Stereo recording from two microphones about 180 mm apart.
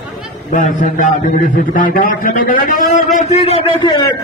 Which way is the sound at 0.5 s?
45° left (ahead or behind).